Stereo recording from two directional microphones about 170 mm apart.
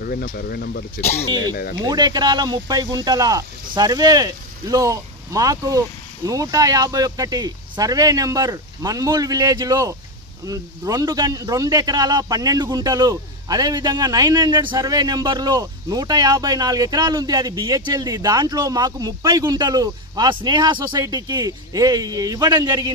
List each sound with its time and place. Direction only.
0.0 s speech: 55° left (ahead or behind)
1.8 s speech: 25° right (ahead or behind)